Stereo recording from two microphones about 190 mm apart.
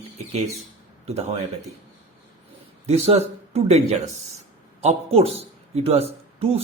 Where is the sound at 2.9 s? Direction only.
35° right (ahead or behind).